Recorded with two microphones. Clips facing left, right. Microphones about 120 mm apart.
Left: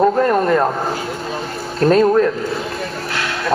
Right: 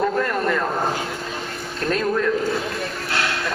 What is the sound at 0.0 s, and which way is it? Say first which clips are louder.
Vehicle: left 7 dB; 35° left (ahead or behind).